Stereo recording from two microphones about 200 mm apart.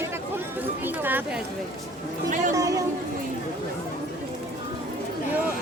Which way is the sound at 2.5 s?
15° right (ahead or behind).